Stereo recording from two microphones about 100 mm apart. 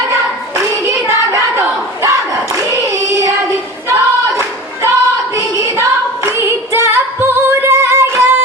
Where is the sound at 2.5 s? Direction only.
30° right (ahead or behind).